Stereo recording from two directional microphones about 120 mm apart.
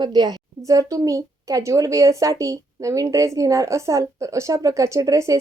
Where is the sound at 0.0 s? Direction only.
35° right (ahead or behind).